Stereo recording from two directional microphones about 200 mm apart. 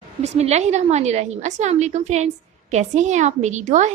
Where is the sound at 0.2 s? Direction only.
35° right (ahead or behind).